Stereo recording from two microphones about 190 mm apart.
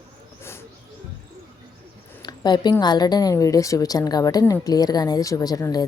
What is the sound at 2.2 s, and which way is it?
A woman's voice, 20° left (ahead or behind).